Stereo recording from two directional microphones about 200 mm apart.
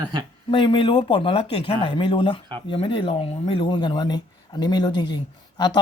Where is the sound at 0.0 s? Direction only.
20° right (ahead or behind).